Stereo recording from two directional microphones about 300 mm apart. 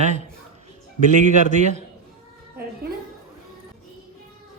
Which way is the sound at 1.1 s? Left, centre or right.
Right.